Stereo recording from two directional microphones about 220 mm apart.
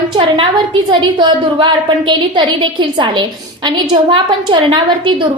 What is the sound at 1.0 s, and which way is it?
A woman's voice, 20° right (ahead or behind).